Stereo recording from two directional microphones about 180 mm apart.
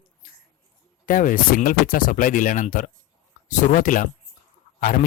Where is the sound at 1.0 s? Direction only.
50° left (ahead or behind).